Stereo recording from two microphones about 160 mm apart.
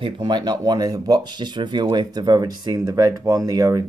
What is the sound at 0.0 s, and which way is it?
Speech, 30° right (ahead or behind).